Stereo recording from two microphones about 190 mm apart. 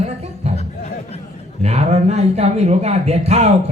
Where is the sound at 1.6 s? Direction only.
35° right (ahead or behind).